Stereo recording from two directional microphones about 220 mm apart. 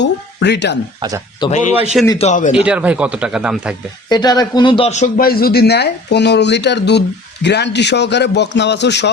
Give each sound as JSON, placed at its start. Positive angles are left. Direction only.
{"t": 0.0, "sound": "speech", "side_deg": 50}
{"t": 1.4, "sound": "speech", "side_deg": 30}
{"t": 2.6, "sound": "speech", "side_deg": -5}
{"t": 4.1, "sound": "a man's voice", "side_deg": 20}